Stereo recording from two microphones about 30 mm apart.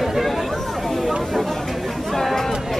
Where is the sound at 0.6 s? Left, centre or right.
Centre.